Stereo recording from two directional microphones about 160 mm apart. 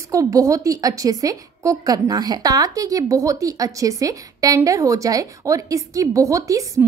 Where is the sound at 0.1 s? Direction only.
20° right (ahead or behind).